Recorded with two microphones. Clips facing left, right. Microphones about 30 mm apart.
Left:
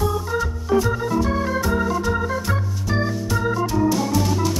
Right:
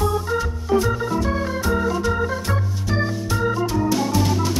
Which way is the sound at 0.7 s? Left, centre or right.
Centre.